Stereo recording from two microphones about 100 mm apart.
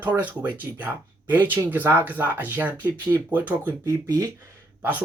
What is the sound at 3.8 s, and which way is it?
Speech, 35° right (ahead or behind).